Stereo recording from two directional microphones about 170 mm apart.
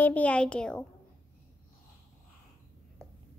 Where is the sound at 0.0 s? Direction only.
10° left (ahead or behind).